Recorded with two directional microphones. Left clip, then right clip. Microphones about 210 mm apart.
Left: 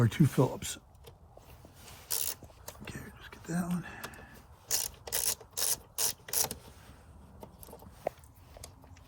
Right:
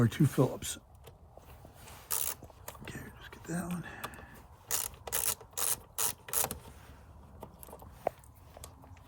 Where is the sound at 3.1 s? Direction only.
25° left (ahead or behind).